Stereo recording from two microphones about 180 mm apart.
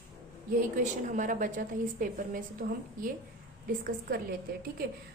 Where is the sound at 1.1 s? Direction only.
45° right (ahead or behind).